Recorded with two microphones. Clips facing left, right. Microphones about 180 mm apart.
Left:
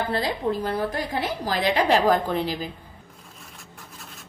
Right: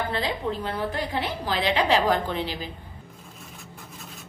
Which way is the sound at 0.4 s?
30° left (ahead or behind).